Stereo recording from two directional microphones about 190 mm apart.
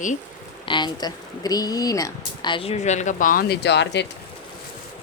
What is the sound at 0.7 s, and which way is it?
Speech, 25° left (ahead or behind).